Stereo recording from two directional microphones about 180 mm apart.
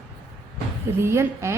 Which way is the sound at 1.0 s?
15° right (ahead or behind).